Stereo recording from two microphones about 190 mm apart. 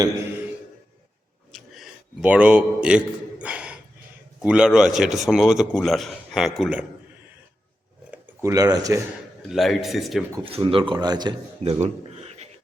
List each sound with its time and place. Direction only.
1.5 s a sound: centre (ahead or behind)
4.4 s a man's voice: 5° right (ahead or behind)
8.1 s speech: 15° right (ahead or behind)
9.5 s a man's voice: centre (ahead or behind)
10.4 s speech: 30° right (ahead or behind)
11.6 s a sound: 35° right (ahead or behind)